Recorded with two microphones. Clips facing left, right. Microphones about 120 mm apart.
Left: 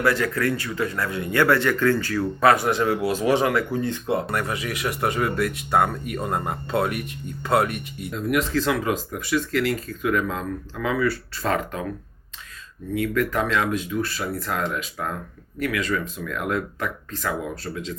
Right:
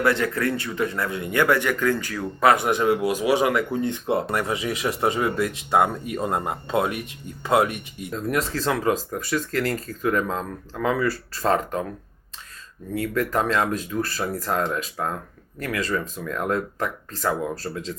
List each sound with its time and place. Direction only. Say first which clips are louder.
0.0 s speech: even; 25° right (ahead or behind)
8.1 s speech: left 2 dB; 35° right (ahead or behind)
12.9 s speech: left 1 dB; 35° right (ahead or behind)